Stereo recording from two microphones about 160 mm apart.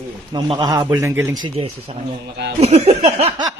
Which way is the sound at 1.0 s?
15° right (ahead or behind).